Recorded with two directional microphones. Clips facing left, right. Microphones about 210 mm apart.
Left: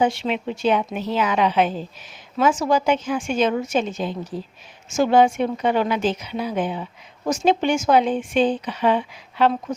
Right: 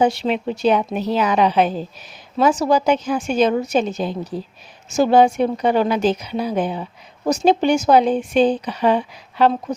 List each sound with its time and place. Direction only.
0.0 s a woman's voice: 40° right (ahead or behind)